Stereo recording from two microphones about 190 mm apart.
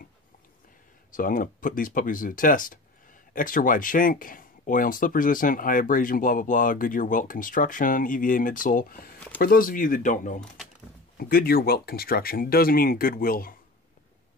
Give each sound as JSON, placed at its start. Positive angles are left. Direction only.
{"t": 1.1, "sound": "speech", "side_deg": 45}